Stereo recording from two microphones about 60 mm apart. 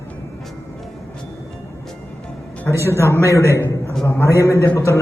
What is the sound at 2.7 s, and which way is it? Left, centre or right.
Speech, left.